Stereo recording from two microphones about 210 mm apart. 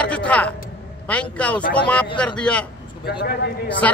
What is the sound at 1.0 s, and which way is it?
A man's voice, 5° left (ahead or behind).